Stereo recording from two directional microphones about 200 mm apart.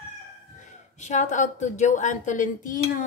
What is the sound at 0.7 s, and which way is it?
A woman's voice, 35° left (ahead or behind).